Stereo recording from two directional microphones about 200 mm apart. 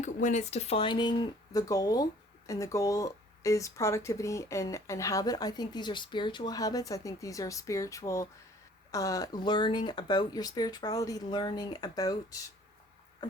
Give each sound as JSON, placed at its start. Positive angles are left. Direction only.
{"t": 0.0, "sound": "speech", "side_deg": 40}